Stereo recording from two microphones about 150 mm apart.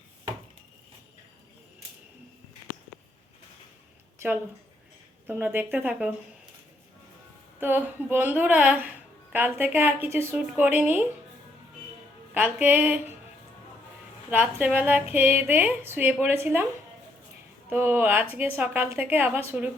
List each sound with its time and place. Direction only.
5.2 s a woman's voice: 15° right (ahead or behind)
7.6 s a woman's voice: 10° right (ahead or behind)
12.3 s a woman's voice: 10° right (ahead or behind)
14.3 s a woman's voice: 10° right (ahead or behind)
17.7 s a woman's voice: 15° right (ahead or behind)